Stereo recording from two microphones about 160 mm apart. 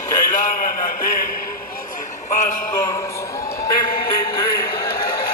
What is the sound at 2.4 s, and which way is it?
Music, 55° left (ahead or behind).